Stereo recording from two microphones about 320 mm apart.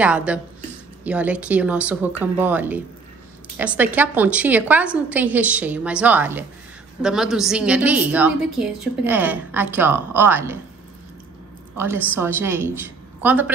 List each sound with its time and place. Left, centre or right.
0.0 s a woman's voice: centre
11.7 s a woman's voice: centre